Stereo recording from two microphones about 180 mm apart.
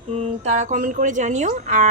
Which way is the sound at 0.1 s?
35° right (ahead or behind).